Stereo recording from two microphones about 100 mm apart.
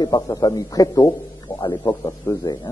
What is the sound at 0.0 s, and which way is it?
A man's voice, 40° left (ahead or behind).